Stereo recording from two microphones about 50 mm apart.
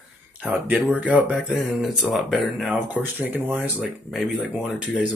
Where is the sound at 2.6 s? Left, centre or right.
Right.